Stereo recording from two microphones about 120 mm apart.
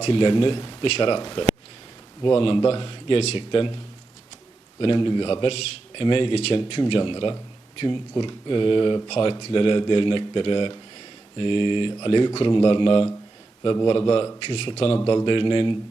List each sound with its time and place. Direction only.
0.0 s speech: 45° left (ahead or behind)
0.9 s speech: 55° left (ahead or behind)
4.8 s speech: 40° left (ahead or behind)
6.6 s speech: 45° left (ahead or behind)
9.0 s speech: 50° left (ahead or behind)
13.6 s speech: 35° left (ahead or behind)
15.0 s speech: 40° left (ahead or behind)